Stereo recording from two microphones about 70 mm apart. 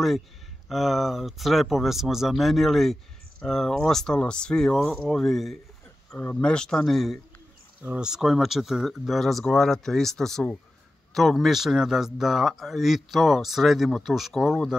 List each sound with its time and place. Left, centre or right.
0.7 s speech: centre
7.8 s speech: centre